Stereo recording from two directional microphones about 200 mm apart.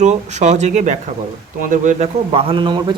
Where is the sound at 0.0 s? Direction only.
35° right (ahead or behind).